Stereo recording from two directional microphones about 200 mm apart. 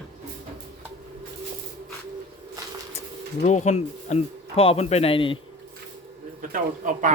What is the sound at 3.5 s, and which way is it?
Speech, 35° left (ahead or behind).